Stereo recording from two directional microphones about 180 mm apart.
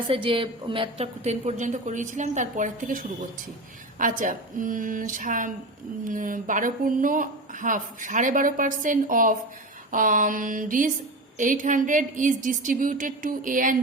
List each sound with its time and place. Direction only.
0.1 s a woman's voice: 30° right (ahead or behind); by 13.7 s 50° right (ahead or behind)